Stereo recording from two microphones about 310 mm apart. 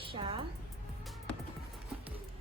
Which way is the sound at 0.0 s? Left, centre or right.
Centre.